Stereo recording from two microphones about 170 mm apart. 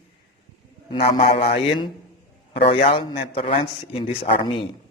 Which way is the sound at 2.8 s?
30° left (ahead or behind).